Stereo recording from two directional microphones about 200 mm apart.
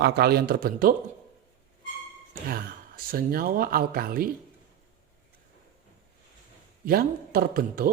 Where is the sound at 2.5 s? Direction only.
45° right (ahead or behind).